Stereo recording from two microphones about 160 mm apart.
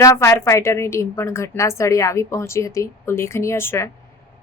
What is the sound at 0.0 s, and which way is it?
A woman's voice, 20° left (ahead or behind).